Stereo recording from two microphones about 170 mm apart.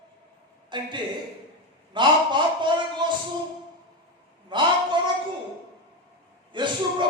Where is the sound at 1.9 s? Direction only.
25° right (ahead or behind).